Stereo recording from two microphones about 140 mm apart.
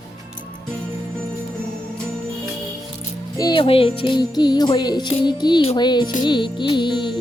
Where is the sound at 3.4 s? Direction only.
35° left (ahead or behind).